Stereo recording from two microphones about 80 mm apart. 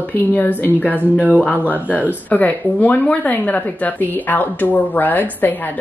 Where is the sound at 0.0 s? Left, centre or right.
Left.